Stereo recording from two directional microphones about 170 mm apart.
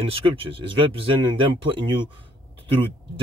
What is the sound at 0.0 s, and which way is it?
Speech, 30° right (ahead or behind).